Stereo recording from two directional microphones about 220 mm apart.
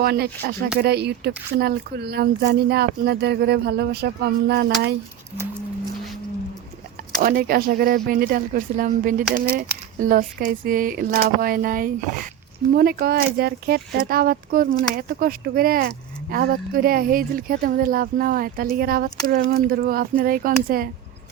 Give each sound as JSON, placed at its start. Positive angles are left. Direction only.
{"t": 0.0, "sound": "speech", "side_deg": -45}
{"t": 7.2, "sound": "speech", "side_deg": -40}